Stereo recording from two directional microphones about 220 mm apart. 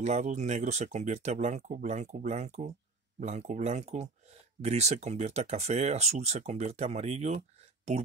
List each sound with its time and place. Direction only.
0.0 s speech: 30° right (ahead or behind)